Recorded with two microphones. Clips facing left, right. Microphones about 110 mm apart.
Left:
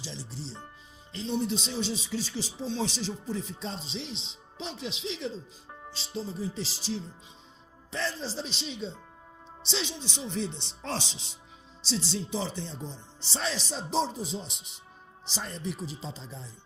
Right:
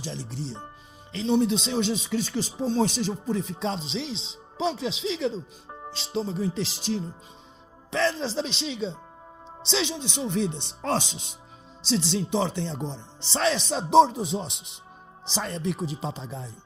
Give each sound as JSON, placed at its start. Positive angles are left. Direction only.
{"t": 0.0, "sound": "speech", "side_deg": -55}
{"t": 5.9, "sound": "speech", "side_deg": -75}
{"t": 7.9, "sound": "speech", "side_deg": -70}
{"t": 11.9, "sound": "speech", "side_deg": -70}